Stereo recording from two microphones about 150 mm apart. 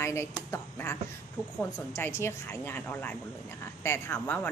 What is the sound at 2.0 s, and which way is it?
Speech, 15° left (ahead or behind).